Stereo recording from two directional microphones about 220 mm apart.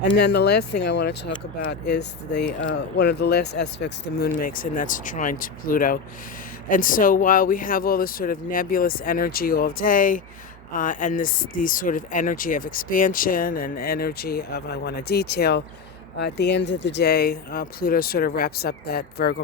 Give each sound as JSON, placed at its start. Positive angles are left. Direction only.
{"t": 0.0, "sound": "speech", "side_deg": 50}